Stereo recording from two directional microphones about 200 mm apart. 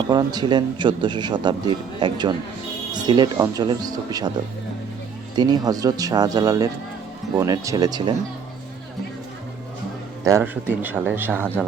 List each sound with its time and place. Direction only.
0.1 s a man's voice: 20° right (ahead or behind)
5.4 s a man's voice: 20° right (ahead or behind)
10.2 s speech: 10° right (ahead or behind)